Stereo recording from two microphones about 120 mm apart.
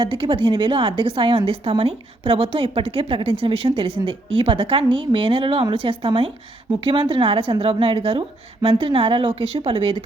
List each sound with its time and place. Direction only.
0.0 s a woman's voice: 45° right (ahead or behind)